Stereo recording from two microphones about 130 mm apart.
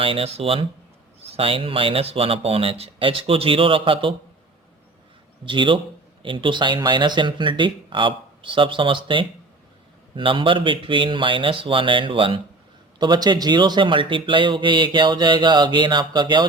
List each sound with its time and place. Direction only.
0.0 s speech: 45° right (ahead or behind)
5.5 s speech: 40° right (ahead or behind)